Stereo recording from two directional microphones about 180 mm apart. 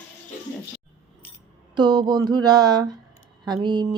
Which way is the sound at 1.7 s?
25° right (ahead or behind).